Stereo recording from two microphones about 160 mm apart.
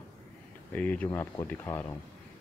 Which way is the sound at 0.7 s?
10° left (ahead or behind).